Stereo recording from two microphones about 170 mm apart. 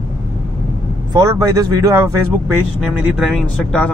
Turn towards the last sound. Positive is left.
turn(degrees=5)  # may be behind; listen again after turning